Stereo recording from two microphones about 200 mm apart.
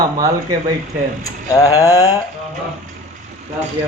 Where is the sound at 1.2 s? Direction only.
15° left (ahead or behind).